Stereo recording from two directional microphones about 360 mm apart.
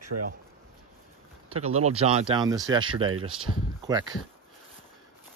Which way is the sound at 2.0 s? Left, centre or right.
Centre.